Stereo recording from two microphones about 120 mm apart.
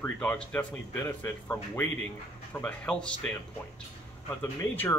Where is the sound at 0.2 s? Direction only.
10° left (ahead or behind).